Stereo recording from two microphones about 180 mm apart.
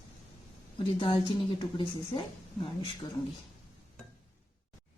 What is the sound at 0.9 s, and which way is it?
Speech, 30° left (ahead or behind).